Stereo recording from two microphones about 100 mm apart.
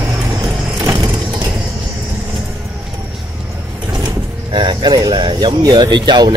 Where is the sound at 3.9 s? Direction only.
45° right (ahead or behind).